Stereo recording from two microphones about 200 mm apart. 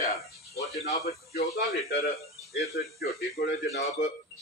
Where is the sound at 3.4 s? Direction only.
40° left (ahead or behind).